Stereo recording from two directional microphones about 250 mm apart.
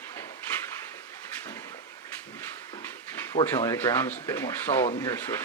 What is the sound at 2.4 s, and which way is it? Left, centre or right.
Dog, centre.